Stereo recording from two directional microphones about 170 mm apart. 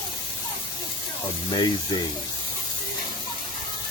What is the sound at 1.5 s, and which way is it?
Speech, 25° left (ahead or behind).